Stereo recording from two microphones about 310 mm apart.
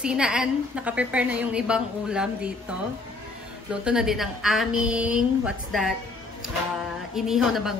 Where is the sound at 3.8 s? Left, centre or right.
Centre.